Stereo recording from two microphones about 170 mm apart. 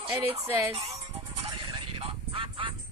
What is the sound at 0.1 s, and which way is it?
Speech, 15° right (ahead or behind).